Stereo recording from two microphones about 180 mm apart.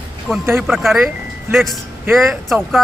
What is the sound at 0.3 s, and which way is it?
Speech, centre (ahead or behind).